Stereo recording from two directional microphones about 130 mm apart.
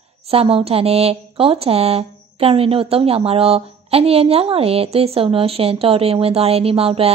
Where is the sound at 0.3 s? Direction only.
50° right (ahead or behind).